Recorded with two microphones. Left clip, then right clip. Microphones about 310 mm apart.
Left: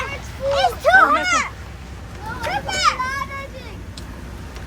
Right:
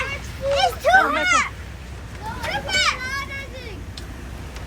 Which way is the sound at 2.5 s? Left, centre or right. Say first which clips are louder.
Left 2 dB; left.